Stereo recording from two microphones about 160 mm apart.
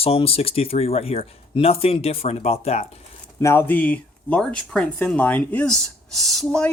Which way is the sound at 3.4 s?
15° left (ahead or behind).